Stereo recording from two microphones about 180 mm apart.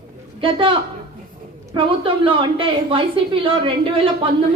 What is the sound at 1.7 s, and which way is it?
A woman's voice, 30° right (ahead or behind).